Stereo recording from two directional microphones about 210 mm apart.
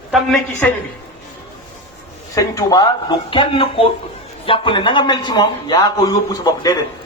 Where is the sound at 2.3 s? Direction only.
15° left (ahead or behind).